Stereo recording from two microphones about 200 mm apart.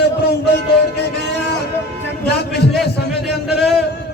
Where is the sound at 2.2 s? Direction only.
55° left (ahead or behind).